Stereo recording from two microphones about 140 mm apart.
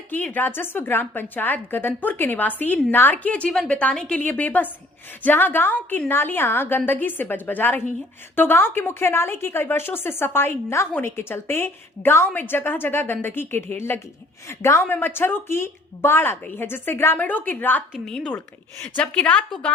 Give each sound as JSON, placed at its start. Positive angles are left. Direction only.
{"t": 0.1, "sound": "a woman's voice", "side_deg": 10}